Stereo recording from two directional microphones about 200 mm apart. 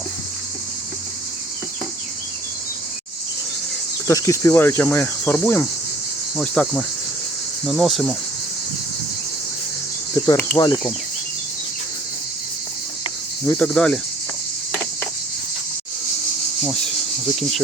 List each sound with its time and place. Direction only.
4.0 s speech: 15° left (ahead or behind)
6.3 s cricket: 5° left (ahead or behind)
10.2 s cricket: 15° left (ahead or behind)
13.4 s speech: 15° left (ahead or behind)
13.7 s cricket: 5° left (ahead or behind)